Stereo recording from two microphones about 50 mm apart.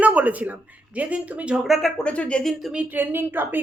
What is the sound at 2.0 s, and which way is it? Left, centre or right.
Speech, left.